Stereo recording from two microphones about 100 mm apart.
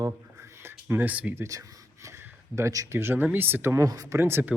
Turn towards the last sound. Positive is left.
turn(degrees=-25)  # may be behind; listen again after turning